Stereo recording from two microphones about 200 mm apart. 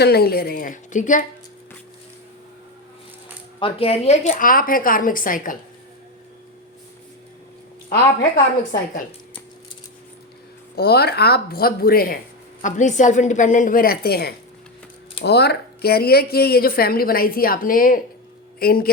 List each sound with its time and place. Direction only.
0.0 s speech: 50° left (ahead or behind)
3.6 s speech: 30° left (ahead or behind)
10.8 s speech: 50° left (ahead or behind)
12.6 s a woman's voice: 40° left (ahead or behind)